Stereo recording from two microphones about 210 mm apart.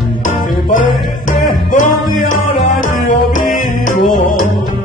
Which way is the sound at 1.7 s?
40° left (ahead or behind).